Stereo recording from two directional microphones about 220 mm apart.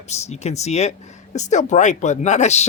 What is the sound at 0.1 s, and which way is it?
Speech, 30° left (ahead or behind).